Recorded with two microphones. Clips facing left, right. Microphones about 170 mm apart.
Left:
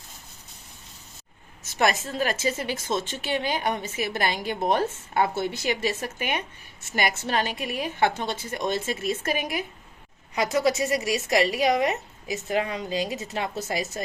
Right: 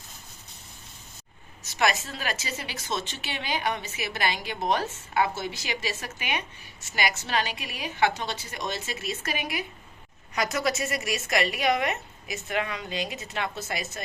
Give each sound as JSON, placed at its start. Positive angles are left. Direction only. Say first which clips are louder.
{"t": 1.8, "sound": "a woman's voice", "louder": "left 3 dB", "side_deg": 50}
{"t": 10.3, "sound": "a woman's voice", "louder": "left 4 dB", "side_deg": 30}